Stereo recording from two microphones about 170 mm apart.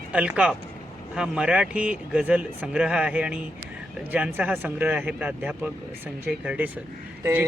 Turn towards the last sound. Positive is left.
turn(degrees=-15)  # may be behind; listen again after turning